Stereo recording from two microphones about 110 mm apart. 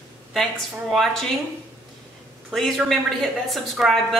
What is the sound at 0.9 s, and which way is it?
Speech, centre (ahead or behind).